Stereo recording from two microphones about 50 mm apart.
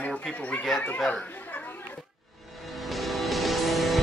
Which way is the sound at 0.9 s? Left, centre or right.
Centre.